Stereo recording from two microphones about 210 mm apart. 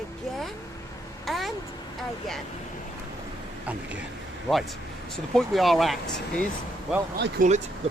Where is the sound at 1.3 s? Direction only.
Centre (ahead or behind).